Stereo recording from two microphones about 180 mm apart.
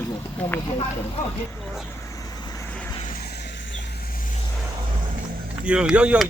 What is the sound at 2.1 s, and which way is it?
Vehicle, 20° left (ahead or behind).